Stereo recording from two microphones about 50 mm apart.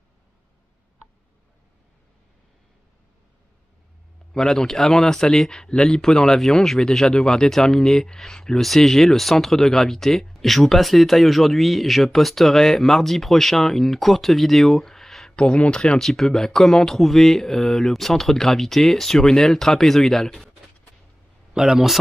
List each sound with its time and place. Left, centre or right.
4.3 s speech: centre
15.3 s speech: left
16.0 s speech: centre
21.5 s speech: centre